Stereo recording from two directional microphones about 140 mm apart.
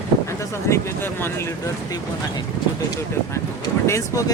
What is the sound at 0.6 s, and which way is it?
Speech, 20° left (ahead or behind).